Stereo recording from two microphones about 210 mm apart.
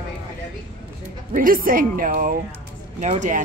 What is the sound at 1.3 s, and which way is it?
Speech, 40° right (ahead or behind).